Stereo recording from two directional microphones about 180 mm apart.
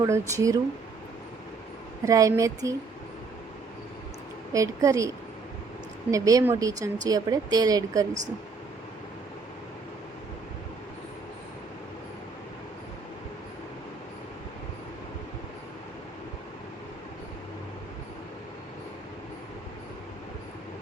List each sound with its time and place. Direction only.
0.0 s speech: 15° right (ahead or behind)
2.0 s speech: 20° right (ahead or behind)
4.5 s speech: 15° right (ahead or behind)